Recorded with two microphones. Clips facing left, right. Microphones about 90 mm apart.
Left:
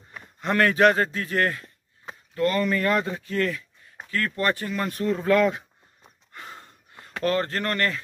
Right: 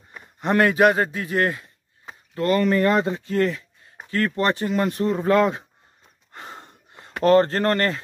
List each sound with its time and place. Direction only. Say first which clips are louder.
0.4 s a man's voice: right 2 dB; 20° right (ahead or behind)
2.3 s speech: right 4 dB; 30° right (ahead or behind)
6.3 s a sound: right 3 dB; 30° right (ahead or behind)